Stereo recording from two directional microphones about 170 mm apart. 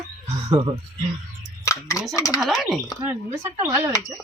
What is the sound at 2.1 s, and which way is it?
Speech, 20° left (ahead or behind).